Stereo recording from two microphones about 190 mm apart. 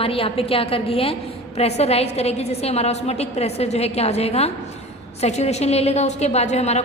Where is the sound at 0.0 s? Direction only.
30° left (ahead or behind).